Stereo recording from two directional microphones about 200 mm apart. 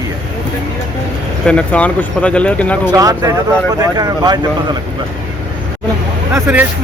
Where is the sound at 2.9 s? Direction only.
15° right (ahead or behind).